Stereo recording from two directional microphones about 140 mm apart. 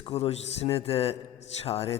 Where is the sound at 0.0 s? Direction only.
45° left (ahead or behind).